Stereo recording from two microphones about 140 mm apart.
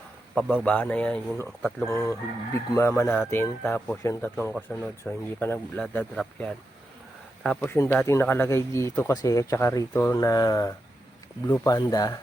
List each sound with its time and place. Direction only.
0.3 s speech: 10° left (ahead or behind)
1.9 s speech: 20° left (ahead or behind)
7.6 s speech: 20° left (ahead or behind)